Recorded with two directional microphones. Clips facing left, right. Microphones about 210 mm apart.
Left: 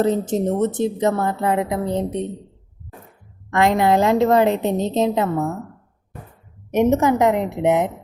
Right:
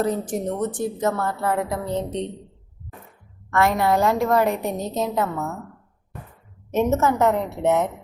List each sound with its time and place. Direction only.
0.0 s a woman's voice: 25° left (ahead or behind)
3.5 s a woman's voice: 20° left (ahead or behind)
6.7 s a woman's voice: 15° left (ahead or behind)